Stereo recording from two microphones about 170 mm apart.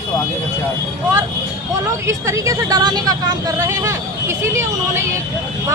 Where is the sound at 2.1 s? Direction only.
20° right (ahead or behind).